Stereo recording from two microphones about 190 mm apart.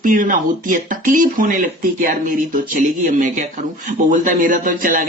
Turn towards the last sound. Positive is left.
turn(degrees=-45)  # may be behind; listen again after turning